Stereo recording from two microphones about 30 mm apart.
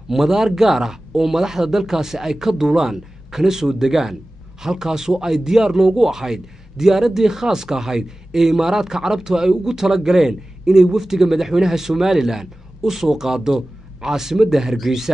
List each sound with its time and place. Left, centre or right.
0.1 s speech: centre